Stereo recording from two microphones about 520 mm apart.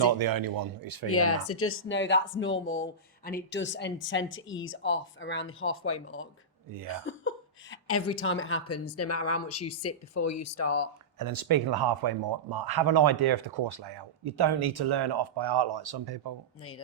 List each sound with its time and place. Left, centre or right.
0.0 s speech: right
1.0 s speech: left
11.2 s speech: right